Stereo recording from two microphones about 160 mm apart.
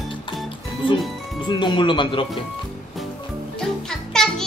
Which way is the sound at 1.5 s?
30° left (ahead or behind).